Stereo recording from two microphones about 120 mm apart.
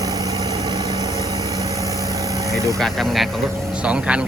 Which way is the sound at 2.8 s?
Centre (ahead or behind).